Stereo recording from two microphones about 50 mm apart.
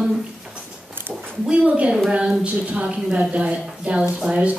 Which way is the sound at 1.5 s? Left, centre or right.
Right.